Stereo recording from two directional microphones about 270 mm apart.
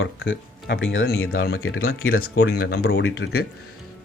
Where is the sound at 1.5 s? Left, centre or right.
Left.